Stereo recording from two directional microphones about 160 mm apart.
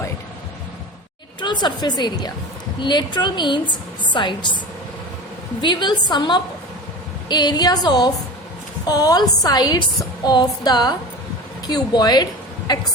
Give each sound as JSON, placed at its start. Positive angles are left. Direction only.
{"t": 1.4, "sound": "a woman's voice", "side_deg": 30}
{"t": 5.6, "sound": "a woman's voice", "side_deg": 30}